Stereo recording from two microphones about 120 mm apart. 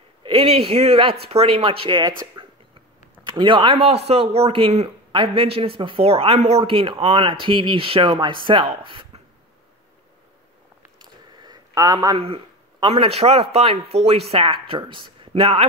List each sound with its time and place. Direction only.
0.2 s speech: 45° right (ahead or behind)
2.0 s speech: 35° right (ahead or behind); by 6.6 s 55° right (ahead or behind)
6.6 s speech: 45° right (ahead or behind)
11.4 s a sound: 30° right (ahead or behind)
12.9 s a man's voice: 60° right (ahead or behind)
14.3 s speech: 50° right (ahead or behind)